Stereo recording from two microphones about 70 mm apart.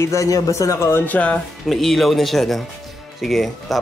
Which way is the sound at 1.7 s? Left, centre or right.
Centre.